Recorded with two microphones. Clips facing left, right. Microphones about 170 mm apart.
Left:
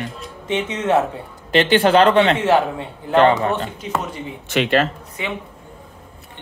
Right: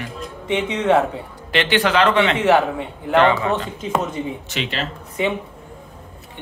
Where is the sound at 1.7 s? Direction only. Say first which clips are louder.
Left 3 dB; 35° left (ahead or behind).